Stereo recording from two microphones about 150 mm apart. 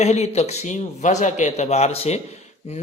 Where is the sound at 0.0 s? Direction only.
45° left (ahead or behind).